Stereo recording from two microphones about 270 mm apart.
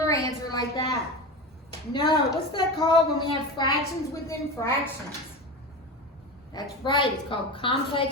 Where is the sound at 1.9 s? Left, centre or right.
Centre.